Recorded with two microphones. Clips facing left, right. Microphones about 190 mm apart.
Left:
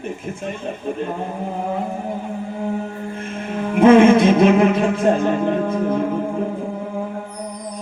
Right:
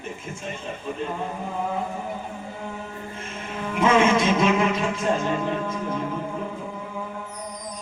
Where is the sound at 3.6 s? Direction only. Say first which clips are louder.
Left 9 dB; 55° left (ahead or behind).